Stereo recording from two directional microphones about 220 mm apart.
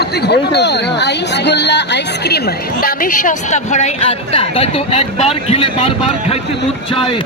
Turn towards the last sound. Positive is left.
turn(degrees=25)  # may be behind; listen again after turning